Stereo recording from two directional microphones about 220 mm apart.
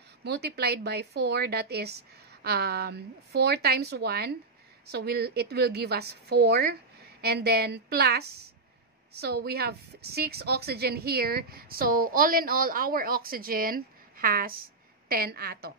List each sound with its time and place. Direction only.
0.2 s a woman's voice: 50° right (ahead or behind)